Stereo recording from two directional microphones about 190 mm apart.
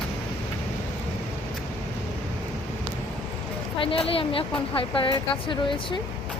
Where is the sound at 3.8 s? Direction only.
30° left (ahead or behind).